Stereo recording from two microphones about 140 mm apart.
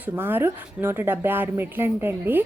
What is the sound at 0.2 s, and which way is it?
Speech, 15° right (ahead or behind).